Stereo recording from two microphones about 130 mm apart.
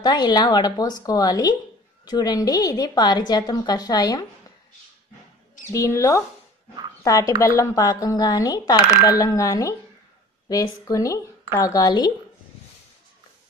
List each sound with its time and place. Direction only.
0.0 s a woman's voice: 30° left (ahead or behind)
5.7 s a woman's voice: 25° left (ahead or behind)